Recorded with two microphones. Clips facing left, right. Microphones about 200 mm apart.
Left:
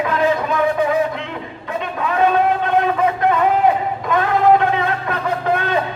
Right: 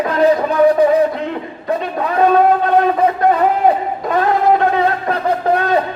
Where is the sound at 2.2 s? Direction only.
40° right (ahead or behind).